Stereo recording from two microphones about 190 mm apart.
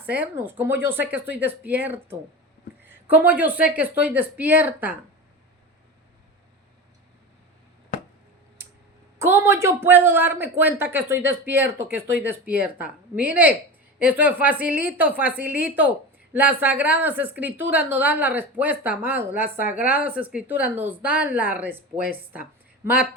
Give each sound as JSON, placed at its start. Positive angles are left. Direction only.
{"t": 0.0, "sound": "speech", "side_deg": -10}
{"t": 9.1, "sound": "speech", "side_deg": -15}